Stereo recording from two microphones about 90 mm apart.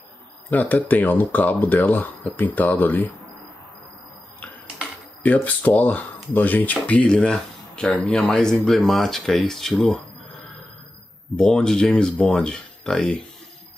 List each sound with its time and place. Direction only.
0.5 s speech: 20° left (ahead or behind)
5.2 s speech: 15° left (ahead or behind)
11.3 s speech: 10° left (ahead or behind)